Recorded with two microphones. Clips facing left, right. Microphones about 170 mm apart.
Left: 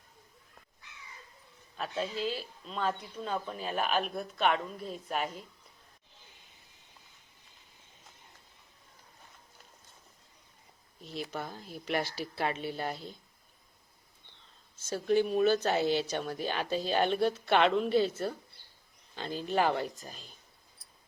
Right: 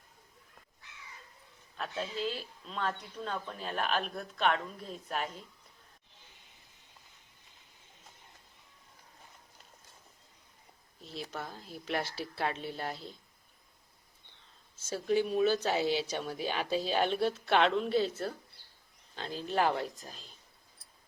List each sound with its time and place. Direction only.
1.7 s speech: 5° left (ahead or behind)
11.0 s speech: centre (ahead or behind)
14.8 s speech: 5° right (ahead or behind)